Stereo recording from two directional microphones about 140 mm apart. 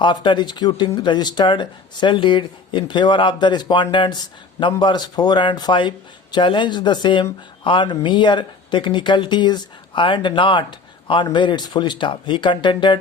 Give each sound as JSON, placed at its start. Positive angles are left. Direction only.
{"t": 0.0, "sound": "speech", "side_deg": 35}